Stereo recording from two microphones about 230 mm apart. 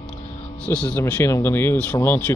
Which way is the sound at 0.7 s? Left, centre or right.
Centre.